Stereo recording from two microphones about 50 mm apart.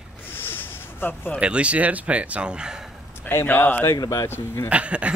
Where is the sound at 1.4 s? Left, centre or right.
Right.